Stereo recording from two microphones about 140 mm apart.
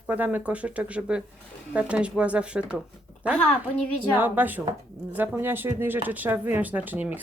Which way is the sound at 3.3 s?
5° left (ahead or behind).